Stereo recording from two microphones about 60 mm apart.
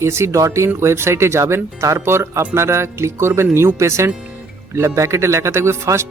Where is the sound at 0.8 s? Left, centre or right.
Right.